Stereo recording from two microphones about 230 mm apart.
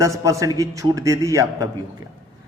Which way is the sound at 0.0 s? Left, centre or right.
Centre.